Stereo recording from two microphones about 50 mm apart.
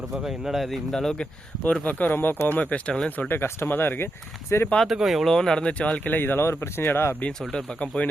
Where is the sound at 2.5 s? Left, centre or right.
Left.